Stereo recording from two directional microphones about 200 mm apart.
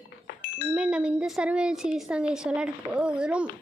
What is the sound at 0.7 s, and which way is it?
A woman's voice, 5° right (ahead or behind).